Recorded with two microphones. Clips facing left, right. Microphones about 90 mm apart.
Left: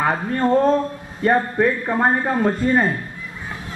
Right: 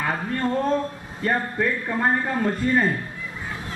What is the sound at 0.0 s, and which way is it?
A man's voice, 35° left (ahead or behind).